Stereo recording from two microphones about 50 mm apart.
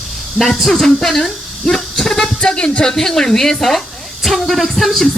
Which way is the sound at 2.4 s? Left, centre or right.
Left.